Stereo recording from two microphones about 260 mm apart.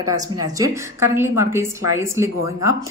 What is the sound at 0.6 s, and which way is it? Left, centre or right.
Speech, centre.